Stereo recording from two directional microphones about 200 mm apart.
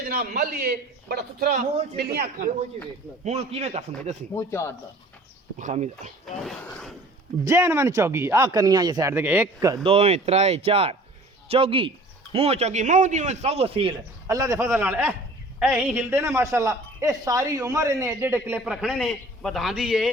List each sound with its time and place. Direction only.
0.0 s a man's voice: 45° right (ahead or behind)
3.2 s a man's voice: 30° right (ahead or behind)
4.4 s speech: 15° left (ahead or behind)
5.5 s a man's voice: 35° right (ahead or behind)
6.4 s a sound: 5° left (ahead or behind)
7.4 s a woman's voice: 15° right (ahead or behind)
9.8 s a man's voice: 30° right (ahead or behind)
14.3 s a woman's voice: 15° right (ahead or behind)